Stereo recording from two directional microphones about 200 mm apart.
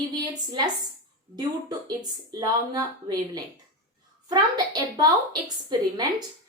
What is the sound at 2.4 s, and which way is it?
A woman's voice, 20° right (ahead or behind).